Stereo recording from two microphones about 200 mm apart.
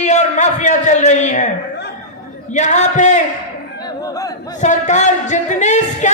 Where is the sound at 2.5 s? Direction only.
35° left (ahead or behind).